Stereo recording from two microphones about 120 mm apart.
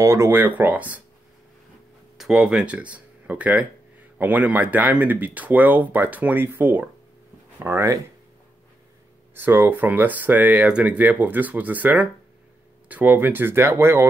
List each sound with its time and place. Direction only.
0.0 s speech: 25° right (ahead or behind)
2.1 s speech: 5° right (ahead or behind); by 8.0 s 20° right (ahead or behind)
9.3 s speech: 15° right (ahead or behind)